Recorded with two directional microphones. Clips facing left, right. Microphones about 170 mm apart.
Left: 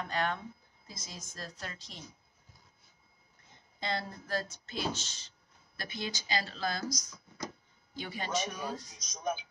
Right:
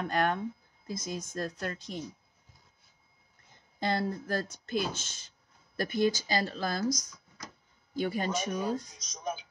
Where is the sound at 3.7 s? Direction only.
50° right (ahead or behind).